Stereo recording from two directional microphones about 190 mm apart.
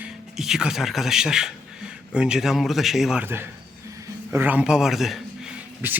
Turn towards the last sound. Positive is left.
turn(degrees=-10)  # may be behind; listen again after turning